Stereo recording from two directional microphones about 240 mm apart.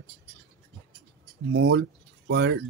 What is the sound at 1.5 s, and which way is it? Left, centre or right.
Speech, right.